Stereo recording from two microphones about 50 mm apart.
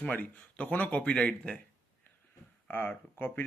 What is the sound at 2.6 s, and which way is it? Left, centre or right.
Speech, left.